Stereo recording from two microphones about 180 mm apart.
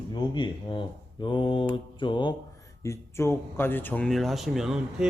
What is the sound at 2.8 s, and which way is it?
Speech, 15° left (ahead or behind).